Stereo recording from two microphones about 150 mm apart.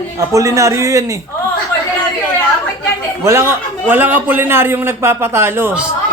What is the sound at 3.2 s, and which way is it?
A man's voice, 20° right (ahead or behind).